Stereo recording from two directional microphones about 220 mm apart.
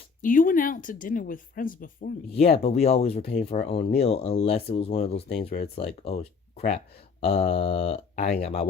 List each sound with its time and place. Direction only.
0.2 s speech: 40° left (ahead or behind)
2.5 s speech: 30° left (ahead or behind)